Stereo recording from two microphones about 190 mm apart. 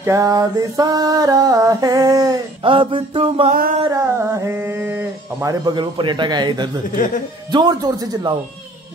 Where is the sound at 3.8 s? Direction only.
15° right (ahead or behind).